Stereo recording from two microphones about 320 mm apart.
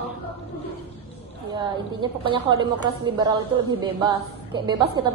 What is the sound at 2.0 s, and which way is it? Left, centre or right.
A woman's voice, centre.